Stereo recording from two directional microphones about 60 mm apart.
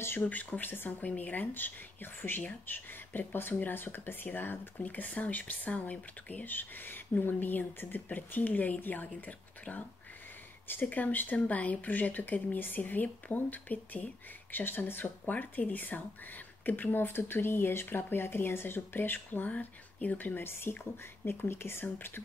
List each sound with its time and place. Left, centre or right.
0.3 s speech: left
20.7 s speech: left